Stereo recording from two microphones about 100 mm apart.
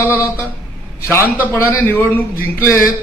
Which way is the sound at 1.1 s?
25° left (ahead or behind).